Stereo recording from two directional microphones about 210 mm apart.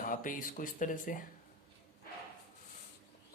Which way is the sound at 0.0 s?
40° left (ahead or behind).